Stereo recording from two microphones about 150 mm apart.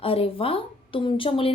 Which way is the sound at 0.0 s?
40° left (ahead or behind).